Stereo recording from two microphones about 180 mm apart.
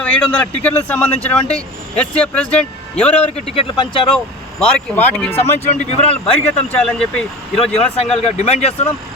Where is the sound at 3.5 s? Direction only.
30° left (ahead or behind).